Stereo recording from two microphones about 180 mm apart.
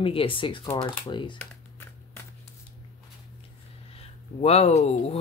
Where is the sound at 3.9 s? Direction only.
35° left (ahead or behind).